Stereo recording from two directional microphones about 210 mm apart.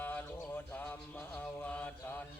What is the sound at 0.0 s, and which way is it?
Mantra, 10° left (ahead or behind).